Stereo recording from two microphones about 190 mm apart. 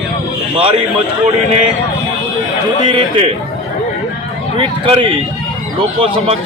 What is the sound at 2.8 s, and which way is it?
Speech, 30° right (ahead or behind).